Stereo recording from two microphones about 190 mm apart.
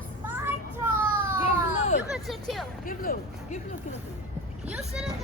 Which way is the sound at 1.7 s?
35° left (ahead or behind).